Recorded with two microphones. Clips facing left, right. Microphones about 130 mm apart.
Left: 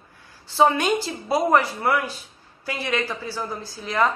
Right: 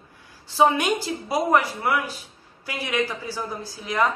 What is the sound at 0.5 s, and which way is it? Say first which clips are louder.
A woman's voice: left 1 dB; 10° right (ahead or behind).